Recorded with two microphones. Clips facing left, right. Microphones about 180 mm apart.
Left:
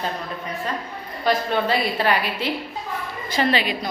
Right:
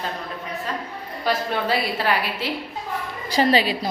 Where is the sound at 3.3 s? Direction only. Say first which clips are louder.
Right 3 dB; 35° right (ahead or behind).